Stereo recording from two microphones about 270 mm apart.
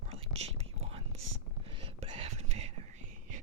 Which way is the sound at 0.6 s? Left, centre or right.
Right.